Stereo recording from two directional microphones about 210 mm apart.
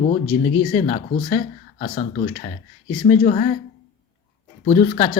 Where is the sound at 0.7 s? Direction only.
30° left (ahead or behind).